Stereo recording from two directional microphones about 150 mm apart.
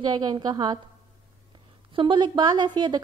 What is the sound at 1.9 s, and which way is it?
Speech, 30° right (ahead or behind).